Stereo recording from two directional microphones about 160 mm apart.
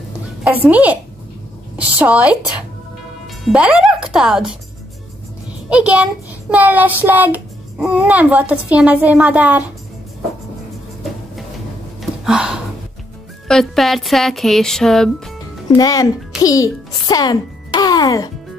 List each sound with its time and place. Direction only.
0.4 s a child's voice: 10° right (ahead or behind)
3.4 s speech: 5° right (ahead or behind)
5.7 s a child's voice: 5° right (ahead or behind)
12.0 s a sound: 5° right (ahead or behind)
13.5 s speech: centre (ahead or behind)
15.7 s a child's voice: 20° left (ahead or behind)